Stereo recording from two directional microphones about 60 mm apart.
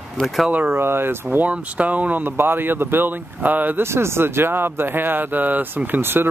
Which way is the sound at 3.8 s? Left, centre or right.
Right.